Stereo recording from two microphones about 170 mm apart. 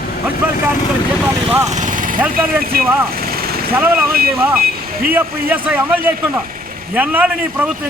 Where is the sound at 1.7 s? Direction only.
45° right (ahead or behind).